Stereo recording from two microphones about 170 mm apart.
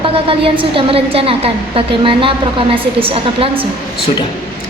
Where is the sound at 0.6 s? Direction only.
30° right (ahead or behind).